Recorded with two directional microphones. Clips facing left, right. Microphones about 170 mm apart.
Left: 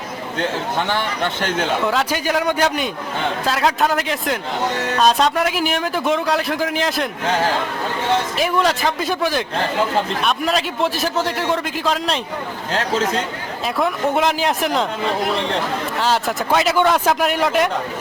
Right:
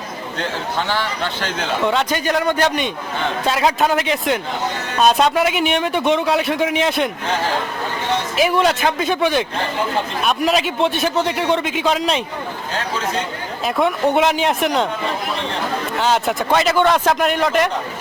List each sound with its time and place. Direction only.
0.8 s a man's voice: 15° left (ahead or behind)
1.8 s a man's voice: centre (ahead or behind)
8.4 s a man's voice: 5° right (ahead or behind)
13.7 s a man's voice: centre (ahead or behind)
16.0 s a man's voice: centre (ahead or behind)